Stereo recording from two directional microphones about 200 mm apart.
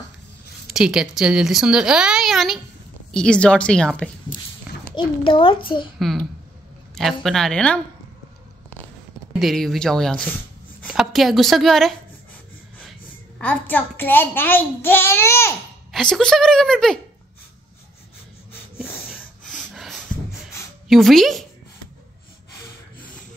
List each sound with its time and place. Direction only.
0.7 s a woman's voice: centre (ahead or behind)
4.9 s a child's voice: 25° left (ahead or behind)
5.9 s a child's voice: centre (ahead or behind)
9.4 s a woman's voice: centre (ahead or behind)
13.4 s a child's voice: 10° left (ahead or behind)
19.0 s a sound: centre (ahead or behind)
20.9 s a woman's voice: centre (ahead or behind)